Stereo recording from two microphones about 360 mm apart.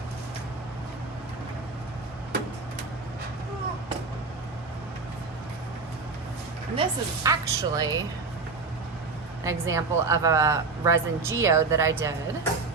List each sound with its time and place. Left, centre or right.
6.7 s speech: centre
9.4 s speech: centre